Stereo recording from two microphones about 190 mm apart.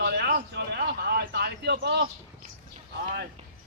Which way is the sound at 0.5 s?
65° right (ahead or behind).